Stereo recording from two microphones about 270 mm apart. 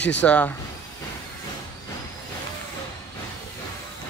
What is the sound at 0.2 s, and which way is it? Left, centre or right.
Speech, centre.